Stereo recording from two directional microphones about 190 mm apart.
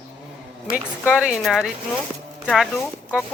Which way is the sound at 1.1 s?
5° right (ahead or behind).